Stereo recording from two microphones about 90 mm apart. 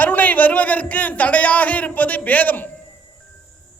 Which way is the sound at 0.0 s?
20° left (ahead or behind).